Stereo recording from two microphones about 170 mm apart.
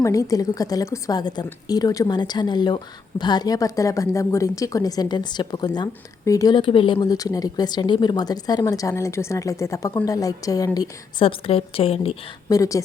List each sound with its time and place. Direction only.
0.0 s a woman's voice: 20° left (ahead or behind)
10.8 s a woman's voice: 30° left (ahead or behind)
12.5 s a woman's voice: 20° left (ahead or behind)